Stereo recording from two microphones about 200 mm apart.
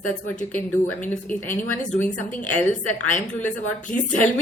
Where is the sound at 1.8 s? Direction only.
40° left (ahead or behind).